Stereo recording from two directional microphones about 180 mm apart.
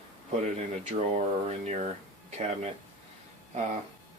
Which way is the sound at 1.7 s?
40° right (ahead or behind).